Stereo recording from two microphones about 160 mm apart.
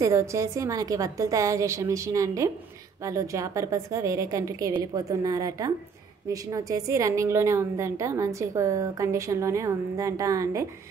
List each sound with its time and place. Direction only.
0.0 s a woman's voice: 20° right (ahead or behind)